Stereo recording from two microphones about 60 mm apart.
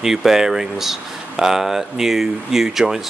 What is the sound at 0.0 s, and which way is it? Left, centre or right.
Speech, centre.